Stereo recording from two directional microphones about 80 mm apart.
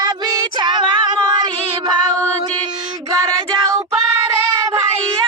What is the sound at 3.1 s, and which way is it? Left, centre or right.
Child singing, right.